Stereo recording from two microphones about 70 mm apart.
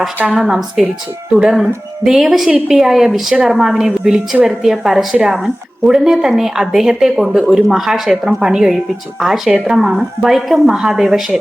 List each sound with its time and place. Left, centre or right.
0.3 s a woman's voice: centre